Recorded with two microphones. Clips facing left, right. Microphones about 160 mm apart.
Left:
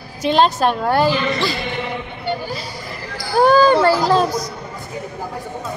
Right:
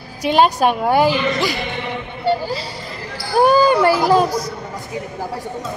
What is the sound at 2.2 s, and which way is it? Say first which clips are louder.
Speech: right 6 dB; 30° right (ahead or behind).